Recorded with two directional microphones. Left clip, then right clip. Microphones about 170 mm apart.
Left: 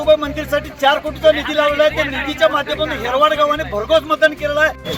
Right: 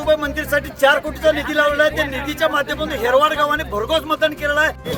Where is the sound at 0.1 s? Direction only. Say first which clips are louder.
Left 3 dB; 15° right (ahead or behind).